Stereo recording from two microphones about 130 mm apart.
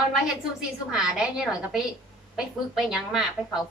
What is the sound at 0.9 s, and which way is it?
A woman's voice, 5° right (ahead or behind).